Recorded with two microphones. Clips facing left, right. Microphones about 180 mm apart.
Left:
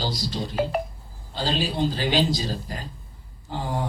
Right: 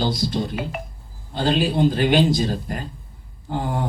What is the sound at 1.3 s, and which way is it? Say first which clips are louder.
Speech: right 6 dB; 55° right (ahead or behind).